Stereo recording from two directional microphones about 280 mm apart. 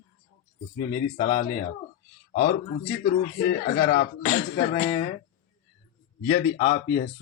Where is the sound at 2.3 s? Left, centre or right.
Left.